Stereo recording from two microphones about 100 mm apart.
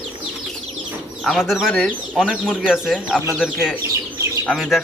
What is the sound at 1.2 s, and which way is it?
Speech, centre (ahead or behind).